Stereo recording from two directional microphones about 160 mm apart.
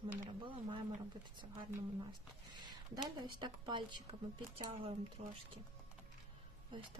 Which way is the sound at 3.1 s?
30° right (ahead or behind).